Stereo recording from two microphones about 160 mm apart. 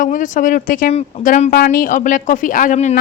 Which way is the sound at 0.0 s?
55° left (ahead or behind).